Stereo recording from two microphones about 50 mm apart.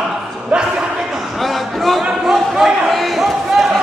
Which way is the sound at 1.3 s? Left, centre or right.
Centre.